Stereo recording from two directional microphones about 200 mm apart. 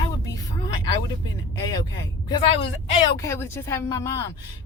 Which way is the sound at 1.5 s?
20° left (ahead or behind).